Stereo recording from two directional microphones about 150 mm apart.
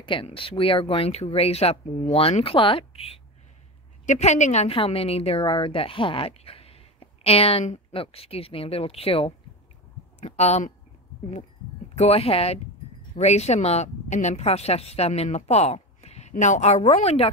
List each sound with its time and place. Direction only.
0.0 s a woman's voice: 35° left (ahead or behind)
4.0 s a woman's voice: 50° left (ahead or behind)
11.9 s speech: 45° left (ahead or behind)